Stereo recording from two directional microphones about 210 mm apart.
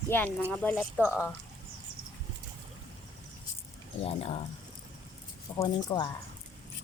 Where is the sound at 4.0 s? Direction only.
30° left (ahead or behind).